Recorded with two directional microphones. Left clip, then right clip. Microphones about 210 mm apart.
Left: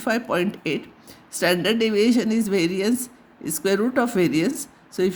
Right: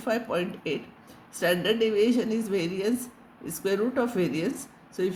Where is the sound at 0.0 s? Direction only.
55° left (ahead or behind).